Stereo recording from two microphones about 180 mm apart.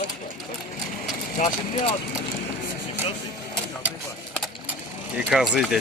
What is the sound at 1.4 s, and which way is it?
Speech, 50° left (ahead or behind).